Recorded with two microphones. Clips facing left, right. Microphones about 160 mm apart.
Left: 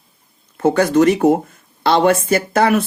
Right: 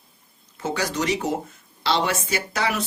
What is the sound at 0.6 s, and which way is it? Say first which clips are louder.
Speech: left 13 dB; 55° left (ahead or behind).